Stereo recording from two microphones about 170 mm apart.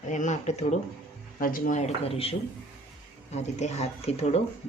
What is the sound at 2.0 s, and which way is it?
Speech, 35° left (ahead or behind).